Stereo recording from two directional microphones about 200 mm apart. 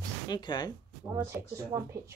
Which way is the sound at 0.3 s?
20° left (ahead or behind).